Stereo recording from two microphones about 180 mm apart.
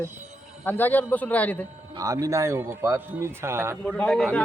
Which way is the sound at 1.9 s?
20° right (ahead or behind).